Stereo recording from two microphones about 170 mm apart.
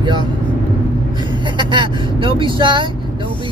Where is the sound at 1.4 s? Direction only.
25° right (ahead or behind).